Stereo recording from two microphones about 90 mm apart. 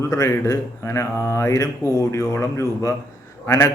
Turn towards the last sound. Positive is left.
turn(degrees=30)  # may be behind; listen again after turning